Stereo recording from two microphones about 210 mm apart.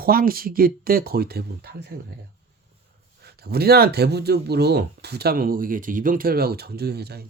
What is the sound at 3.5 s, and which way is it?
Speech, 50° right (ahead or behind).